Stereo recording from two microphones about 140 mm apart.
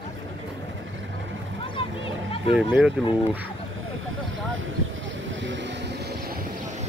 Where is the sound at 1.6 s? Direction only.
40° left (ahead or behind).